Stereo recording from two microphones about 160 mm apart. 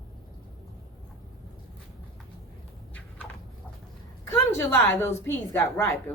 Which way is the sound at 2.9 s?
10° left (ahead or behind).